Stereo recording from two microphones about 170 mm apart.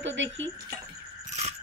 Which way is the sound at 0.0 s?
90° right.